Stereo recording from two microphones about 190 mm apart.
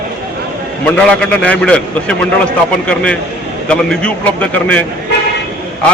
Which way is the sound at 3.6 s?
5° left (ahead or behind).